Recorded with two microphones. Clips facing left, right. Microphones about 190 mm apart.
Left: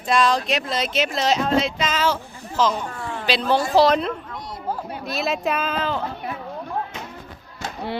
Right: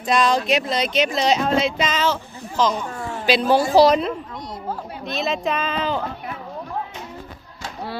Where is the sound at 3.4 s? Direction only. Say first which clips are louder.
Right 3 dB; 10° right (ahead or behind).